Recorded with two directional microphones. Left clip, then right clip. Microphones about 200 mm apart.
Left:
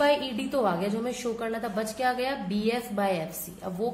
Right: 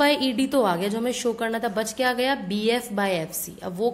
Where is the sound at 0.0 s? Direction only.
45° right (ahead or behind).